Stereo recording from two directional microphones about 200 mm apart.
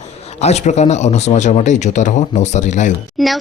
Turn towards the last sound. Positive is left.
turn(degrees=0)  # may be behind; listen again after turning